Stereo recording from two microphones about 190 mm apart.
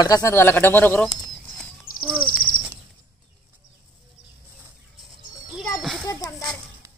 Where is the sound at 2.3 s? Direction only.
50° left (ahead or behind).